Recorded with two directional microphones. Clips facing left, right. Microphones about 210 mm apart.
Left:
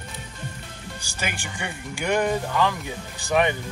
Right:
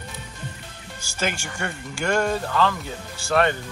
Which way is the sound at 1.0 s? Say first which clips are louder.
Right 5 dB; 15° left (ahead or behind).